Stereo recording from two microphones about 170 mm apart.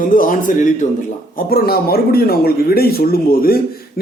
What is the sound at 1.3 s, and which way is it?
Speech, 65° left (ahead or behind).